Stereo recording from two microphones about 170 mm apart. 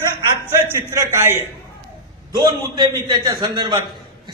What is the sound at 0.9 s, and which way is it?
Speech, 15° right (ahead or behind).